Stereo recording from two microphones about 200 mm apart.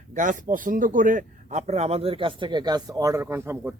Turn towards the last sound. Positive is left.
turn(degrees=-10)  # may be behind; listen again after turning